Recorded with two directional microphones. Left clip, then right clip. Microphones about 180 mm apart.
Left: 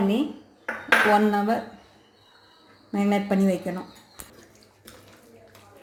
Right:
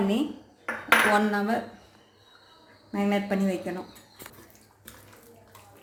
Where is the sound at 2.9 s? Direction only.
60° left (ahead or behind).